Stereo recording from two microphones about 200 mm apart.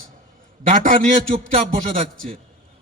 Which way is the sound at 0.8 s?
40° right (ahead or behind).